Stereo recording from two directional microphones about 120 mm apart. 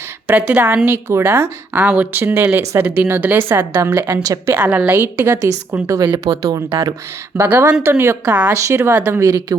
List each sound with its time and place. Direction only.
0.3 s a woman's voice: 10° right (ahead or behind); by 4.5 s 25° right (ahead or behind)
4.5 s a woman's voice: 10° right (ahead or behind); by 6.6 s 30° right (ahead or behind)
7.3 s a woman's voice: 15° right (ahead or behind)
8.5 s a woman's voice: 25° right (ahead or behind)